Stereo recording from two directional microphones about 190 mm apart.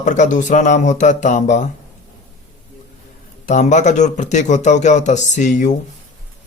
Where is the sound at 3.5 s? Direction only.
40° left (ahead or behind).